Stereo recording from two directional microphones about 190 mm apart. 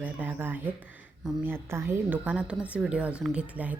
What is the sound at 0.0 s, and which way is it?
A woman's voice, 10° right (ahead or behind).